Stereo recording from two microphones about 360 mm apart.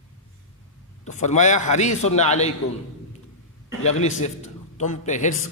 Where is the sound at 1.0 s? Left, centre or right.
Centre.